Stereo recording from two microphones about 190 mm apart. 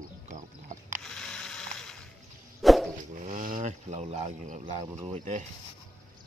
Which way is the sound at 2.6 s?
Centre (ahead or behind).